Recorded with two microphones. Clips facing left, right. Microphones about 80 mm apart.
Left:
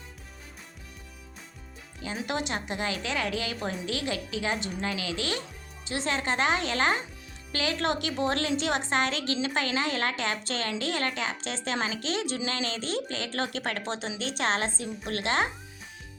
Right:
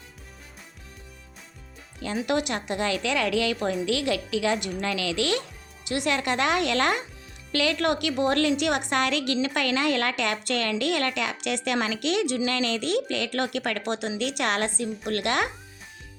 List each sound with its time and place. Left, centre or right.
2.0 s a woman's voice: right
7.5 s a woman's voice: right
11.6 s a woman's voice: right